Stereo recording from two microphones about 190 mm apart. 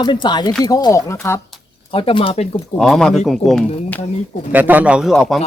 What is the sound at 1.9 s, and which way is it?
Speech, 25° left (ahead or behind).